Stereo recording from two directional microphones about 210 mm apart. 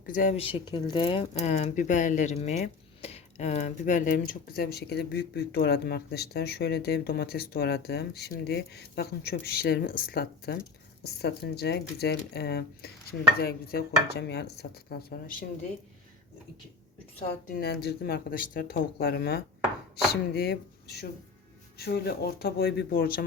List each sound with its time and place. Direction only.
0.0 s speech: 40° left (ahead or behind)
17.5 s speech: 50° left (ahead or behind)